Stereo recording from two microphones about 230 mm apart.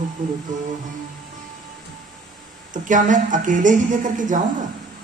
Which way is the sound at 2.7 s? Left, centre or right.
Right.